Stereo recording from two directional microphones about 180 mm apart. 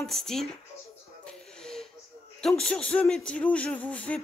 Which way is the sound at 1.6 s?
Centre (ahead or behind).